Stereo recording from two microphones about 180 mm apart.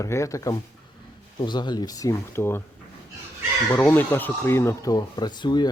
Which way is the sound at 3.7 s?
10° left (ahead or behind).